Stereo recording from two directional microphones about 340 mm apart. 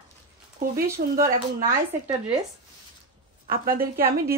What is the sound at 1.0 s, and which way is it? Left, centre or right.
Speech, right.